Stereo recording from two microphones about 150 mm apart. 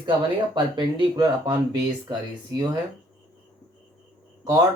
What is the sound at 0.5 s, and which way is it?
Speech, 30° right (ahead or behind).